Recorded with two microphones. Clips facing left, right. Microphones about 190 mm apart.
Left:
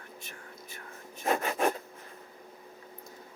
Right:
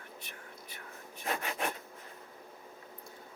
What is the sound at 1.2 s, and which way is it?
Rub, 45° left (ahead or behind).